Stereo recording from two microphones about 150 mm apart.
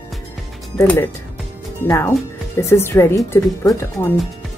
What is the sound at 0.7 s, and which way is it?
Speech, 15° left (ahead or behind).